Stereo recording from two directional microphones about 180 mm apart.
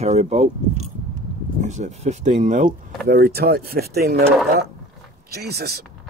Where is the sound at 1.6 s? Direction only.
40° right (ahead or behind); by 4.2 s 60° right (ahead or behind).